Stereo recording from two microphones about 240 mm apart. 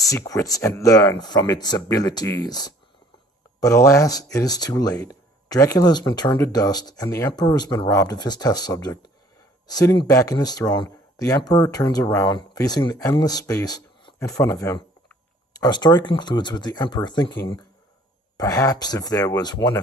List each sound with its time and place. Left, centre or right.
0.0 s speech: centre